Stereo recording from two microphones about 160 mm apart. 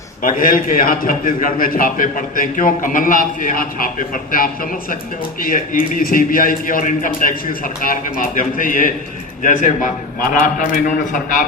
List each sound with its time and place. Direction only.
0.2 s a man's voice: 60° left (ahead or behind)